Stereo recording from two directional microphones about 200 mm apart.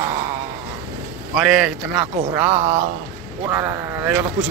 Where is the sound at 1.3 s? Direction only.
5° right (ahead or behind).